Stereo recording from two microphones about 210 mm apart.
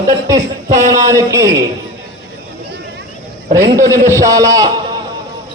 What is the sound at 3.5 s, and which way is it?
A man's voice, 15° right (ahead or behind).